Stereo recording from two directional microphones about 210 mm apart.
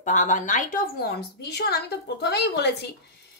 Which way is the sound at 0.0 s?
35° left (ahead or behind).